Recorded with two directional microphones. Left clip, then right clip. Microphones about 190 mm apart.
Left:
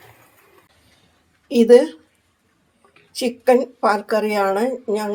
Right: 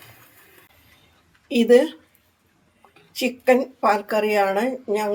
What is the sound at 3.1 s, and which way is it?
Speech, 25° left (ahead or behind).